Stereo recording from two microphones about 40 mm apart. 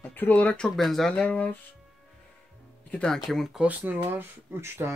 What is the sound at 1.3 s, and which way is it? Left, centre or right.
Speech, left.